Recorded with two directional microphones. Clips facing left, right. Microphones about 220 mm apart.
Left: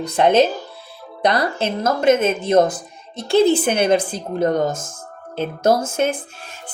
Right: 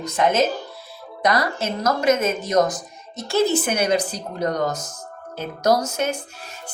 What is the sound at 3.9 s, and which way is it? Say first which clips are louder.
Speech: left 4 dB; 50° left (ahead or behind).